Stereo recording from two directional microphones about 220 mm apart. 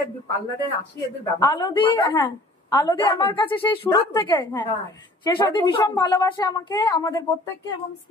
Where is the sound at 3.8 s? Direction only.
20° left (ahead or behind).